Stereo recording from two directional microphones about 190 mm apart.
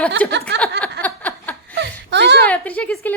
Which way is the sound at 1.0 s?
10° left (ahead or behind).